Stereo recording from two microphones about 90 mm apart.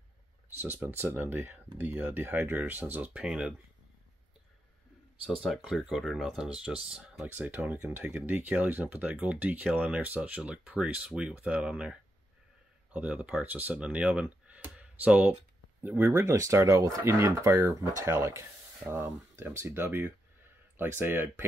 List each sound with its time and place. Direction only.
0.6 s speech: 20° right (ahead or behind)
5.2 s speech: centre (ahead or behind)
7.2 s speech: 20° right (ahead or behind)